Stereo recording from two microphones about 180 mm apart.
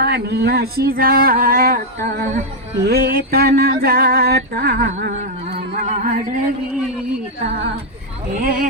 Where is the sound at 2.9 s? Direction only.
60° right (ahead or behind).